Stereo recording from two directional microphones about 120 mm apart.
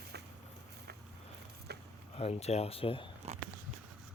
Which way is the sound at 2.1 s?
60° left (ahead or behind).